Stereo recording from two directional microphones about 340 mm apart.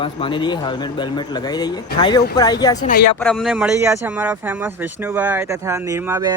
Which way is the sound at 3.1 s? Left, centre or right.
Centre.